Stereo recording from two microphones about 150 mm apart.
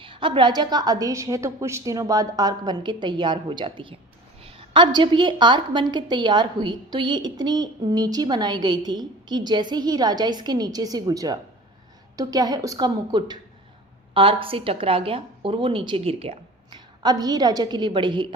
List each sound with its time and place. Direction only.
0.0 s a woman's voice: 35° right (ahead or behind)